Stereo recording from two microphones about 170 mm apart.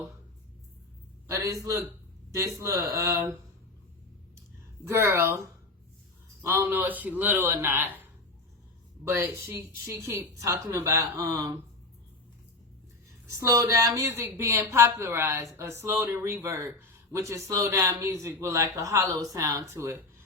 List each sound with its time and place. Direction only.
1.3 s a man's voice: 20° right (ahead or behind)
4.9 s speech: 15° right (ahead or behind)
9.0 s a woman's voice: 15° right (ahead or behind)
13.4 s speech: 20° right (ahead or behind)